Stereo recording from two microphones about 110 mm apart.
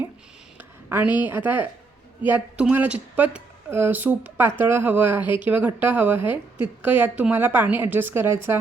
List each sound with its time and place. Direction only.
0.9 s a woman's voice: 15° right (ahead or behind)